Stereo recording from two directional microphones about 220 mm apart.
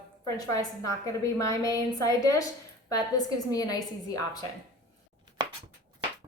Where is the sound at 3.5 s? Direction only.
15° left (ahead or behind).